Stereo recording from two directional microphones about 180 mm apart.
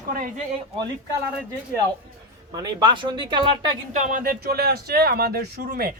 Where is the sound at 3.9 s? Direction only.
45° right (ahead or behind).